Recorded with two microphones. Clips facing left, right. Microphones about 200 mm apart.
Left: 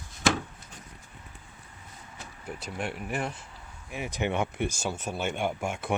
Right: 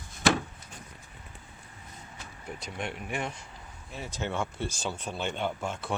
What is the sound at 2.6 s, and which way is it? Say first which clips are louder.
Speech: left 2 dB; 5° left (ahead or behind).